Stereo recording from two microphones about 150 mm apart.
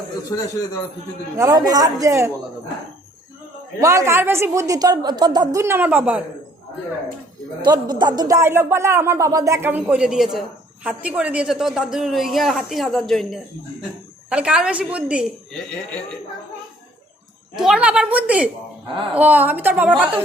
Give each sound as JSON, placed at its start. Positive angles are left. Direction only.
{"t": 1.4, "sound": "a woman's voice", "side_deg": -25}
{"t": 3.8, "sound": "a woman's voice", "side_deg": -20}
{"t": 7.6, "sound": "a woman's voice", "side_deg": -30}
{"t": 17.6, "sound": "speech", "side_deg": -5}